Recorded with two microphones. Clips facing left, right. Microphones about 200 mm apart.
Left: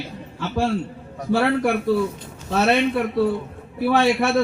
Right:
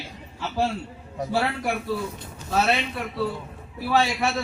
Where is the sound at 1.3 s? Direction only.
55° left (ahead or behind).